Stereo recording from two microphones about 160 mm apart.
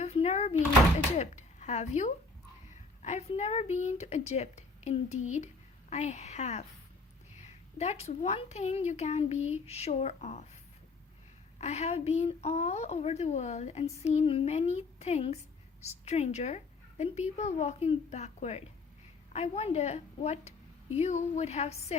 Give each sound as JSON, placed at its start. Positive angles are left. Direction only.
{"t": 0.0, "sound": "a sound", "side_deg": 40}
{"t": 1.1, "sound": "a woman's voice", "side_deg": 45}
{"t": 11.6, "sound": "a woman's voice", "side_deg": 45}